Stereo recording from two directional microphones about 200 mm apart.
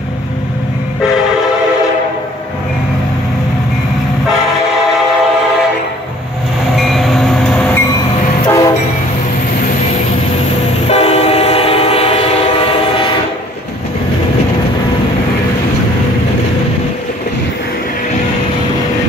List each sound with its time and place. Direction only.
6.8 s train: centre (ahead or behind)
8.5 s train: 15° left (ahead or behind)
10.9 s train: 30° left (ahead or behind)